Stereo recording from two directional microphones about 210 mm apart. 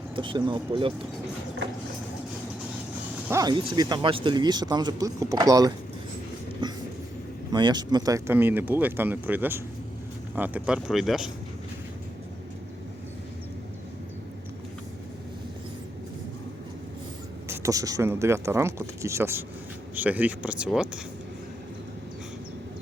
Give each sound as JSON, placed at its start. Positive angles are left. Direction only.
{"t": 0.2, "sound": "speech", "side_deg": -20}
{"t": 3.2, "sound": "speech", "side_deg": -15}
{"t": 7.5, "sound": "speech", "side_deg": -20}
{"t": 17.6, "sound": "speech", "side_deg": -15}